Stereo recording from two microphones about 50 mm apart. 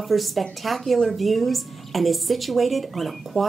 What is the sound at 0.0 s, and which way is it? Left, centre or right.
A woman's voice, centre.